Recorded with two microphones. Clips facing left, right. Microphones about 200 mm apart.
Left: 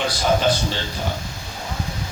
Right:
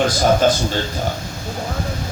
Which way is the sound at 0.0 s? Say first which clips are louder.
Right 5 dB; 45° right (ahead or behind).